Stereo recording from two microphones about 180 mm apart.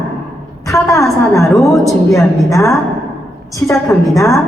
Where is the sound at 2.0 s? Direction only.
15° left (ahead or behind).